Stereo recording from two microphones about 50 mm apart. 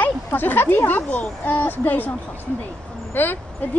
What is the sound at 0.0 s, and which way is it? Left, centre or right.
Speech, left.